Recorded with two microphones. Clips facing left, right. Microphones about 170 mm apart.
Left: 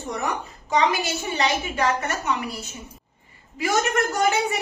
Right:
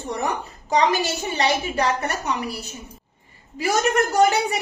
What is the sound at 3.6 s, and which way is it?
Speech, 35° right (ahead or behind).